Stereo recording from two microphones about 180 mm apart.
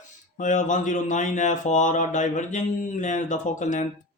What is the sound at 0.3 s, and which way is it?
Speech, 45° left (ahead or behind).